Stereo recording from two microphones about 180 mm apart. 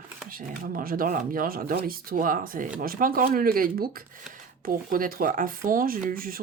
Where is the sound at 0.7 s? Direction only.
55° right (ahead or behind).